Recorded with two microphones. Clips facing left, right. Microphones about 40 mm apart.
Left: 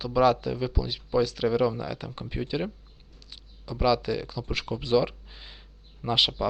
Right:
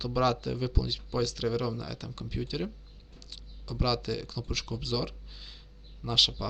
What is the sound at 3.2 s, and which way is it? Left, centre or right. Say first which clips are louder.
Speech: even; centre.